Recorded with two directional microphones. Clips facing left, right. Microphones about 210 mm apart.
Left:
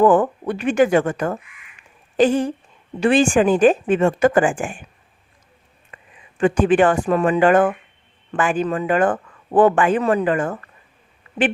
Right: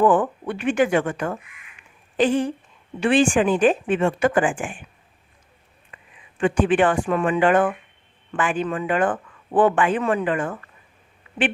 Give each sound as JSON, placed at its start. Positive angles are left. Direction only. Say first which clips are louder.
{"t": 0.0, "sound": "speech", "louder": "left 3 dB", "side_deg": 40}
{"t": 5.9, "sound": "speech", "louder": "left 3 dB", "side_deg": 40}